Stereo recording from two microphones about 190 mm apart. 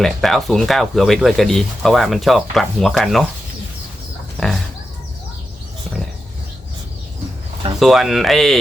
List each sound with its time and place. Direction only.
0.0 s speech: centre (ahead or behind)
4.4 s a sound: centre (ahead or behind)
7.8 s speech: centre (ahead or behind)